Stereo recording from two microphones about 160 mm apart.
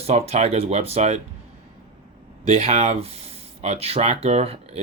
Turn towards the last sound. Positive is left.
turn(degrees=-40)  # may be behind; listen again after turning